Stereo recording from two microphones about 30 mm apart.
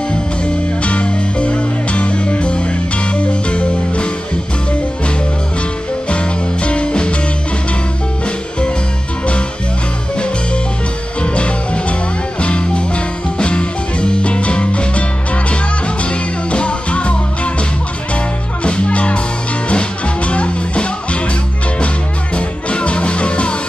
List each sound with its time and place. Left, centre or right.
0.8 s music: left
6.0 s music: left
11.2 s music: left